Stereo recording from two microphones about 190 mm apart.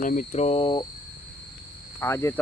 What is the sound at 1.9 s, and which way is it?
Speech, 15° left (ahead or behind).